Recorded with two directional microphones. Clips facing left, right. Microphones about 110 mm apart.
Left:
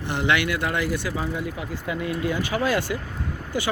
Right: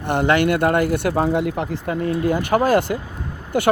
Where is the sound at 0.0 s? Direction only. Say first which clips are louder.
Right 6 dB; 50° right (ahead or behind).